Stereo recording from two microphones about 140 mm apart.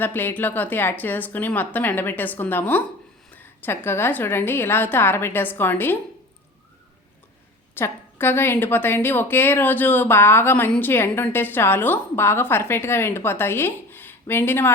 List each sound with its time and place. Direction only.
0.0 s a woman's voice: 15° left (ahead or behind)
7.8 s a woman's voice: 15° left (ahead or behind)